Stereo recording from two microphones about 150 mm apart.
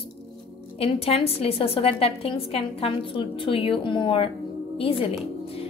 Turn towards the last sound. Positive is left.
turn(degrees=40)  # may be behind; listen again after turning